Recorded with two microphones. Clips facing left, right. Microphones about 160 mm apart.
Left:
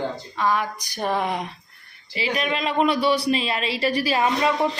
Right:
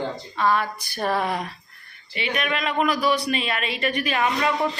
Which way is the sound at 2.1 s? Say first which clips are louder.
Left 1 dB; 30° left (ahead or behind).